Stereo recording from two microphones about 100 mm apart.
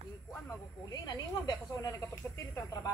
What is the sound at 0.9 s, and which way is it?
Speech, 40° left (ahead or behind).